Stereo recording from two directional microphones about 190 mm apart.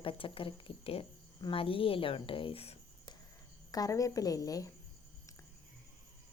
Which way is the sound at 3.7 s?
20° left (ahead or behind).